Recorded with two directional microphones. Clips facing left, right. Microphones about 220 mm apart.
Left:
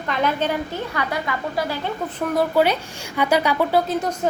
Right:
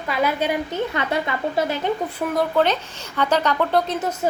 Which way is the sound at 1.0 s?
25° right (ahead or behind).